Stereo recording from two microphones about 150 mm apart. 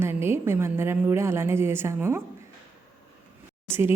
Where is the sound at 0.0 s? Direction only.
15° right (ahead or behind).